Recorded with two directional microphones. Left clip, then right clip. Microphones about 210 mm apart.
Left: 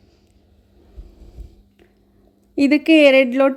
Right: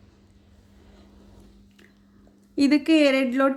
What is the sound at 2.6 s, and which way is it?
Speech, 20° left (ahead or behind).